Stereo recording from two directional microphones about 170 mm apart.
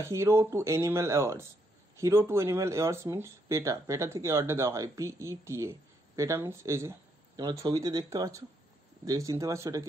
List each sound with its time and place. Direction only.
0.0 s speech: 15° right (ahead or behind)